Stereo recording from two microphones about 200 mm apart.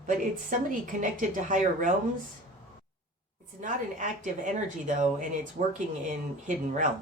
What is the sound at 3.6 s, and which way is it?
Speech, 40° right (ahead or behind).